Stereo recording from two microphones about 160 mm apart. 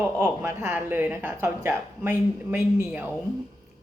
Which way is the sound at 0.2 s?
15° right (ahead or behind).